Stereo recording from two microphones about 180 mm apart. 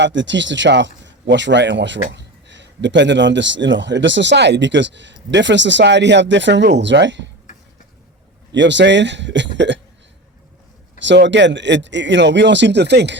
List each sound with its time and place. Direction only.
0.0 s a man's voice: 90° right
8.5 s a man's voice: 80° right
11.0 s a man's voice: 80° right